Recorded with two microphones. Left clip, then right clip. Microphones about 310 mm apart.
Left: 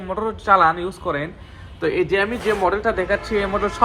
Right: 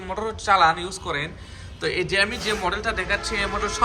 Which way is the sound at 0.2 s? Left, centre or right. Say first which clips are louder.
Left 3 dB; centre.